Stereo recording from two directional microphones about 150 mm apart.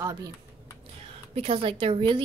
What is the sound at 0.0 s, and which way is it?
Speech, 25° right (ahead or behind).